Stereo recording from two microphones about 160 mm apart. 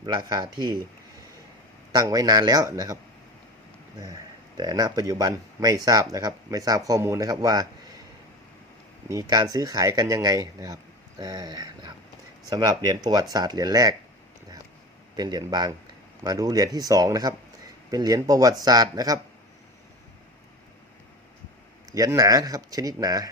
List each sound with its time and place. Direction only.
0.0 s speech: 30° right (ahead or behind)
1.9 s speech: 25° right (ahead or behind)
4.5 s speech: 25° right (ahead or behind)
9.0 s speech: 20° right (ahead or behind)
15.1 s speech: 25° right (ahead or behind)
21.9 s speech: 20° right (ahead or behind)